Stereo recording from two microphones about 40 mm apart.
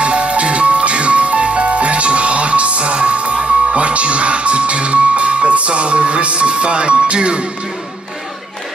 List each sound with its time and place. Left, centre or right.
0.0 s music: right